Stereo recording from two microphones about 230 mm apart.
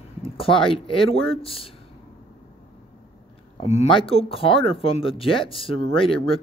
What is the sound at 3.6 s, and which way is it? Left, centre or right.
Speech, left.